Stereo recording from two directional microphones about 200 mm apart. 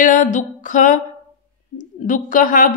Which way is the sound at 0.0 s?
40° left (ahead or behind).